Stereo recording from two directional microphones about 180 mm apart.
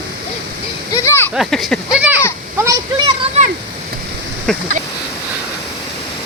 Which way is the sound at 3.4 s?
35° right (ahead or behind).